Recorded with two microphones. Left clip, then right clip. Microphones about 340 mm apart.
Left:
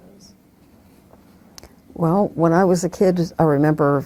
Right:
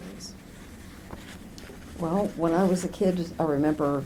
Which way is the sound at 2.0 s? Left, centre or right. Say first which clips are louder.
Left 9 dB; left.